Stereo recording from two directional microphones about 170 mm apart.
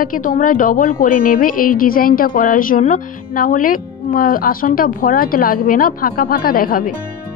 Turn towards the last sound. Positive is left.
turn(degrees=60)  # may be behind; listen again after turning